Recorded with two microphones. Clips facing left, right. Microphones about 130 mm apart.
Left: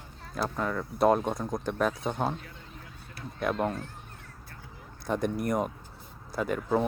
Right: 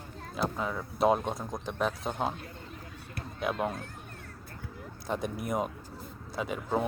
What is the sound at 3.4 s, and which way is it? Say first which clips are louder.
Speech: left 2 dB; 5° right (ahead or behind).